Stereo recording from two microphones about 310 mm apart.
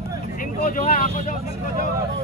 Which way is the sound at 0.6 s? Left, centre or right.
Left.